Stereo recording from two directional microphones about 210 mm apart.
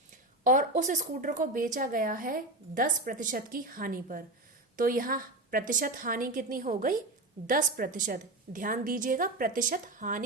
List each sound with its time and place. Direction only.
0.4 s speech: 40° right (ahead or behind)